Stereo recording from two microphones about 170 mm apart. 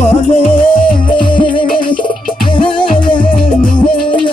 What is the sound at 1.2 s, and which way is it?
Music, 30° left (ahead or behind).